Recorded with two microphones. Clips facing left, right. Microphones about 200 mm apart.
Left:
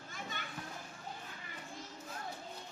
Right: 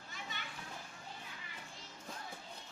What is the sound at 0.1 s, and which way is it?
Children playing, 50° left (ahead or behind).